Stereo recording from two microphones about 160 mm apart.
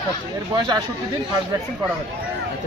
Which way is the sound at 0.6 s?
25° right (ahead or behind).